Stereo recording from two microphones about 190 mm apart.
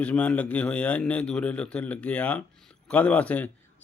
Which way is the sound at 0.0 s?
5° left (ahead or behind).